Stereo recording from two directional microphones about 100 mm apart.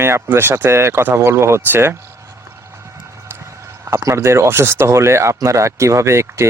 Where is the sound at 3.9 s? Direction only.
30° right (ahead or behind).